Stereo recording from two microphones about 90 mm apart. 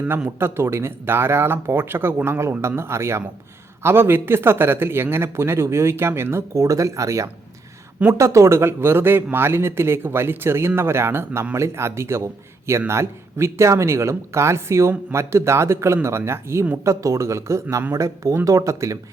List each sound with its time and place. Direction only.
0.3 s a man's voice: 30° right (ahead or behind)